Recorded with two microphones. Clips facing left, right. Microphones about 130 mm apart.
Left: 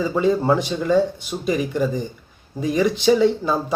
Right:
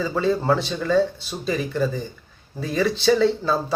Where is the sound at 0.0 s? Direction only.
15° left (ahead or behind).